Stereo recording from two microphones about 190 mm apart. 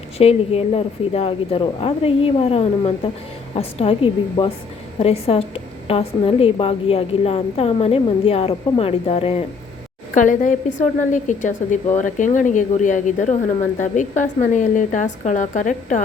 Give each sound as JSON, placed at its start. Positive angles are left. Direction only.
{"t": 0.2, "sound": "a woman's voice", "side_deg": 30}
{"t": 10.2, "sound": "a woman's voice", "side_deg": 40}